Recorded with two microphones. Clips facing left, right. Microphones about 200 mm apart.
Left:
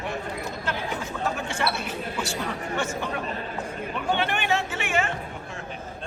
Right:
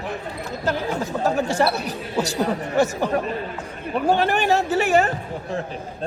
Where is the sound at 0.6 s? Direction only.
40° right (ahead or behind).